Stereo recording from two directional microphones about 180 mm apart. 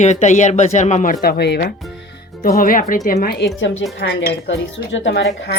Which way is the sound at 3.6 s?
90° left.